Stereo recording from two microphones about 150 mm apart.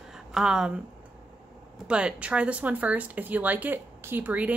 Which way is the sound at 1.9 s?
5° right (ahead or behind).